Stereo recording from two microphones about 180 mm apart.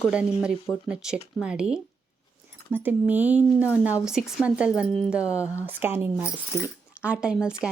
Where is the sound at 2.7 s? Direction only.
10° right (ahead or behind).